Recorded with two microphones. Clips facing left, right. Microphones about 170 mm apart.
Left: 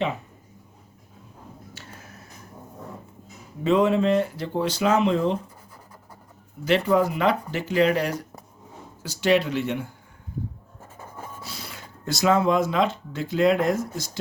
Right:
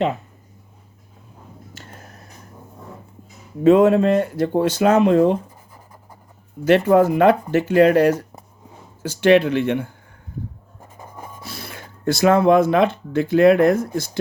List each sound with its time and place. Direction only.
3.6 s speech: 50° right (ahead or behind)
6.7 s speech: 55° right (ahead or behind)
10.8 s writing: 15° right (ahead or behind)
11.4 s speech: 55° right (ahead or behind)